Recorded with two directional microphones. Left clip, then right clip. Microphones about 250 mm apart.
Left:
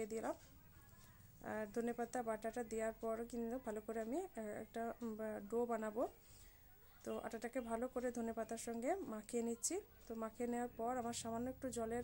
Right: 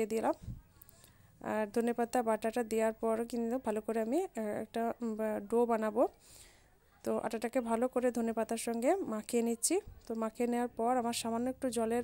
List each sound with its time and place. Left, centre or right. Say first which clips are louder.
0.0 s speech: right 11 dB; right
1.4 s speech: right 10 dB; right